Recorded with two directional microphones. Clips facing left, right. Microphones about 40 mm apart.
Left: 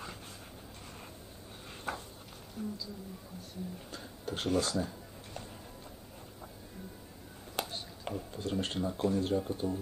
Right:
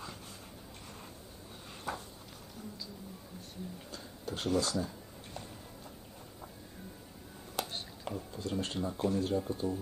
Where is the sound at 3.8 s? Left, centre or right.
Left.